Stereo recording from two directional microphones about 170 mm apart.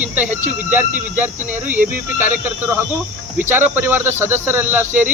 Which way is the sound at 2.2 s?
10° right (ahead or behind).